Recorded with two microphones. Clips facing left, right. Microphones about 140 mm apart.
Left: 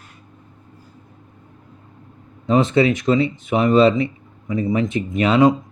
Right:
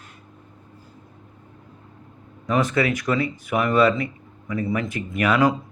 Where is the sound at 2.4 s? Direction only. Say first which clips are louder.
Left 5 dB; 25° left (ahead or behind).